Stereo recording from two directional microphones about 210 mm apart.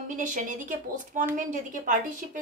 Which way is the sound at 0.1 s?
40° right (ahead or behind).